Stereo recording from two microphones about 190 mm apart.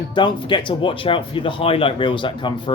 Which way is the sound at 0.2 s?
25° left (ahead or behind).